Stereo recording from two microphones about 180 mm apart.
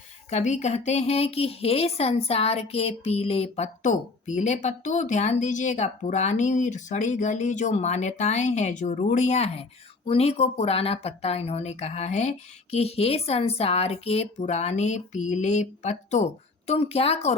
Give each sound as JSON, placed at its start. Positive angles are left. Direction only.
{"t": 0.3, "sound": "a woman's voice", "side_deg": 40}